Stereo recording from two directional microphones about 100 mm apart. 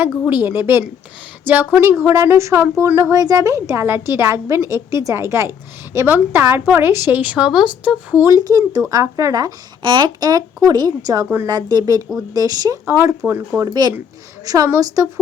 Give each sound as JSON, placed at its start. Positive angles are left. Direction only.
{"t": 0.3, "sound": "a woman's voice", "side_deg": -20}
{"t": 8.3, "sound": "speech", "side_deg": -40}
{"t": 13.7, "sound": "a woman's voice", "side_deg": -45}